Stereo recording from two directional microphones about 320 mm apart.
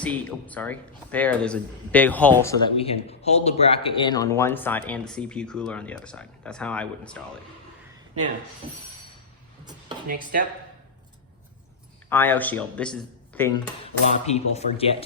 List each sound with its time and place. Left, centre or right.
0.0 s speech: centre
12.0 s speech: centre
13.8 s speech: centre